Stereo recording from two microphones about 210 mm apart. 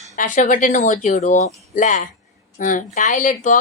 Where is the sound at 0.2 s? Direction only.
40° left (ahead or behind).